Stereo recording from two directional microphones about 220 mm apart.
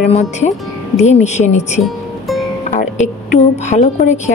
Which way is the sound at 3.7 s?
35° left (ahead or behind).